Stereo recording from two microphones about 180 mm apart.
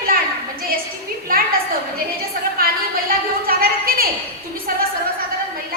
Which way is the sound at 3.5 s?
55° right (ahead or behind).